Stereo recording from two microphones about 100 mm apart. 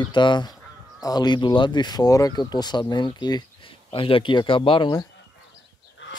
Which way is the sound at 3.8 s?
65° left (ahead or behind).